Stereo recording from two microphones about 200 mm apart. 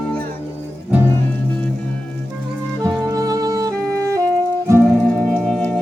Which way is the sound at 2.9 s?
15° right (ahead or behind).